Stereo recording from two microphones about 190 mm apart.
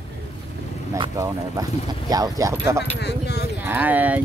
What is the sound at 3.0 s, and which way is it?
Speech, 60° left (ahead or behind).